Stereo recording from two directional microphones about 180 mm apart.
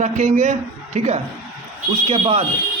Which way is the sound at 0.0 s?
40° right (ahead or behind).